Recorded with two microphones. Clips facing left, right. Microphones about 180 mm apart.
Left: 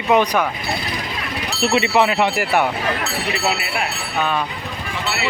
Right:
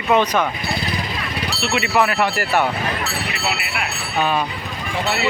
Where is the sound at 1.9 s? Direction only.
20° left (ahead or behind).